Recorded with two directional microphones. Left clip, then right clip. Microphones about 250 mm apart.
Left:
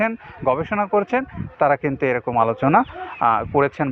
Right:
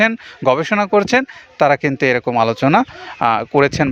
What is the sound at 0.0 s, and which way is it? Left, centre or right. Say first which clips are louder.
Speech: right 6 dB; right.